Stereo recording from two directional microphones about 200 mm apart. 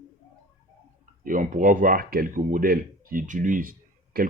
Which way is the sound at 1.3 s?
40° right (ahead or behind).